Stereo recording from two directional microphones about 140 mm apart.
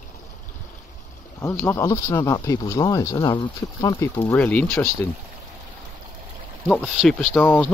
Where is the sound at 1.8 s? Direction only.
25° left (ahead or behind).